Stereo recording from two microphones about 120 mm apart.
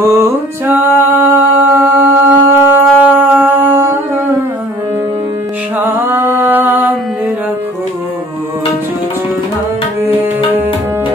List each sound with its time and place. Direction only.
0.0 s music: 20° right (ahead or behind)
5.8 s music: 15° right (ahead or behind)